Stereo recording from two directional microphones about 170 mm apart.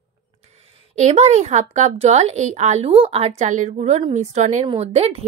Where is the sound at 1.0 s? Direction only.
40° right (ahead or behind).